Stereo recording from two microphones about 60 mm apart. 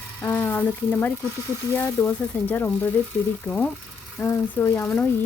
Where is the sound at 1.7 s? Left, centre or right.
Left.